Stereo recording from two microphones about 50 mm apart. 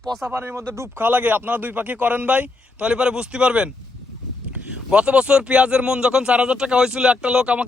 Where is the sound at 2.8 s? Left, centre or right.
Centre.